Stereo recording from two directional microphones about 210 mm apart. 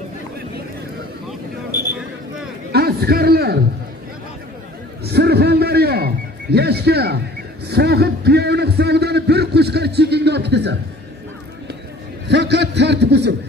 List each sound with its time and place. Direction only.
2.7 s a man's voice: 50° right (ahead or behind)
5.0 s a sound: 50° right (ahead or behind)
7.6 s a man's voice: 50° right (ahead or behind)
12.3 s a man's voice: 55° right (ahead or behind)